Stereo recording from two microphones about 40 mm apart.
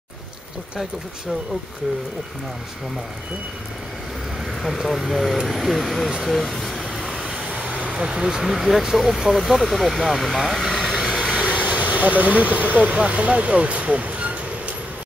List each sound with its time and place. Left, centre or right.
4.5 s speech: centre
6.9 s vehicle: centre
7.4 s speech: right; by 11.0 s centre
11.1 s vehicle: centre
11.4 s speech: right